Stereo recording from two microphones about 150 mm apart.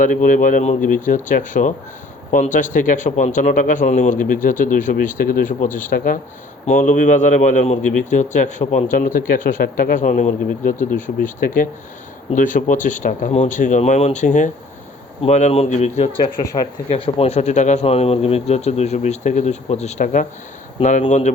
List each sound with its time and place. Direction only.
0.0 s a man's voice: 65° left (ahead or behind)